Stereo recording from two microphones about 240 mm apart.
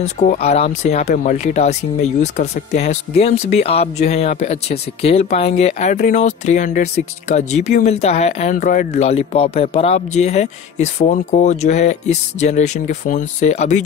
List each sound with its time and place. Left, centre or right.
0.0 s speech: left